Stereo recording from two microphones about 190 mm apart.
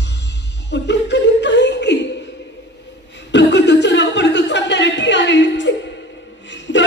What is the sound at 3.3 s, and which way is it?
Chuckle, 65° left (ahead or behind).